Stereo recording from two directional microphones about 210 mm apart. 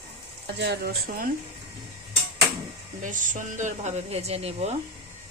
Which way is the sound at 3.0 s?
40° right (ahead or behind).